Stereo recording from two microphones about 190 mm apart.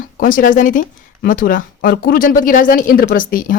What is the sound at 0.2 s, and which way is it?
Speech, 45° left (ahead or behind).